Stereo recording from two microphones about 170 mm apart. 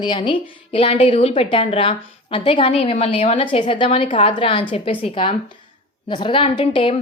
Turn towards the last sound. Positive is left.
turn(degrees=30)  # may be behind; listen again after turning